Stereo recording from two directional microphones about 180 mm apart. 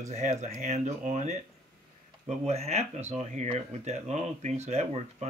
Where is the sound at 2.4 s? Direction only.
35° right (ahead or behind).